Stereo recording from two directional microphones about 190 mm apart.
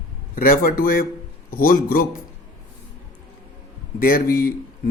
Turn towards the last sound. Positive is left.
turn(degrees=50)  # may be behind; listen again after turning